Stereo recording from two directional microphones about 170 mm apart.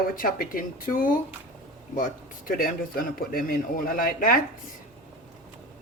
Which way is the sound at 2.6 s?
60° left (ahead or behind).